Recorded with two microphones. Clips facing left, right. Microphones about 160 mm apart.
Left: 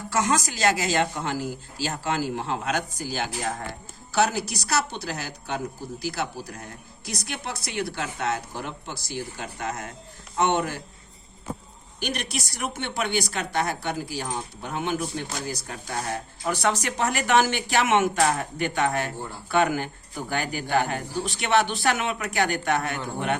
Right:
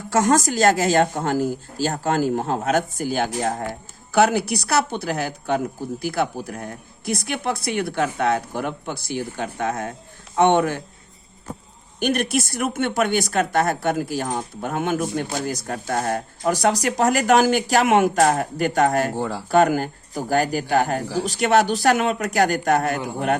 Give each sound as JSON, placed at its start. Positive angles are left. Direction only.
{"t": 0.1, "sound": "a woman's voice", "side_deg": -50}
{"t": 11.9, "sound": "speech", "side_deg": -50}
{"t": 19.1, "sound": "speech", "side_deg": -90}
{"t": 19.5, "sound": "speech", "side_deg": -40}